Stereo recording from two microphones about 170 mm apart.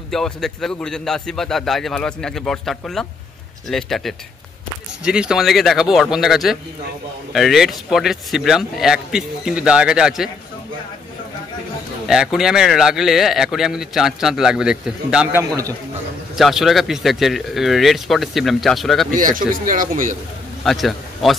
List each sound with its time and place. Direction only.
0.1 s speech: centre (ahead or behind)
12.1 s speech: 5° right (ahead or behind)
19.1 s speech: 55° right (ahead or behind)
20.6 s a man's voice: centre (ahead or behind)